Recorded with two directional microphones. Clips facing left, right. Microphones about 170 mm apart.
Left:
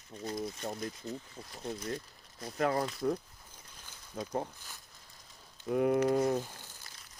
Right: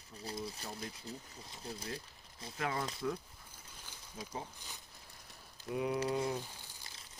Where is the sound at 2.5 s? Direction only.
45° left (ahead or behind).